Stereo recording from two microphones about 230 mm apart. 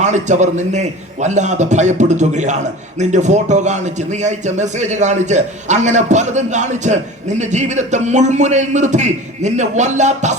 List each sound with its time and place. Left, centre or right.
0.0 s a man's voice: right